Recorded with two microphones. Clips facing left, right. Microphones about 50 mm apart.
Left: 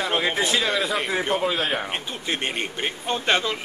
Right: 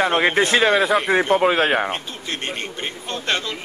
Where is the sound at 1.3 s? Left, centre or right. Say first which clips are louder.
Right 7 dB; right.